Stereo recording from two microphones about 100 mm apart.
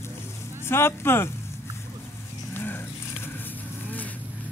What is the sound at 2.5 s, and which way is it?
Livestock, 20° left (ahead or behind).